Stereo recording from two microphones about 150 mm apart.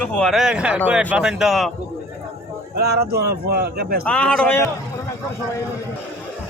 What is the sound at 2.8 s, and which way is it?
Speech, 90° right.